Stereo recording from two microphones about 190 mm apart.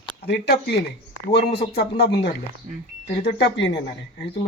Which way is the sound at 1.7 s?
55° left (ahead or behind).